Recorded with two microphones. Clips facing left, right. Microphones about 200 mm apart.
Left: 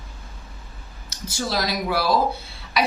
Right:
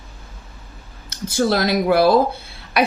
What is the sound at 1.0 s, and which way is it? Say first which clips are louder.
Speech: right 9 dB; 55° right (ahead or behind).